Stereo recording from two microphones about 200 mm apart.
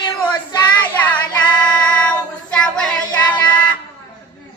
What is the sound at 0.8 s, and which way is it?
Child singing, 5° left (ahead or behind).